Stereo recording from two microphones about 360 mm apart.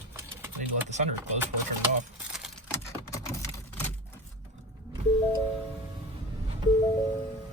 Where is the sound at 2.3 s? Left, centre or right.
Centre.